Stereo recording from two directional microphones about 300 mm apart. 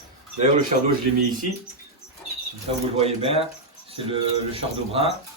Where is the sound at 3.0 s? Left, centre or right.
Centre.